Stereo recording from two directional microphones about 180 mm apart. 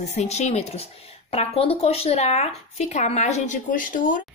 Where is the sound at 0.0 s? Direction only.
40° left (ahead or behind).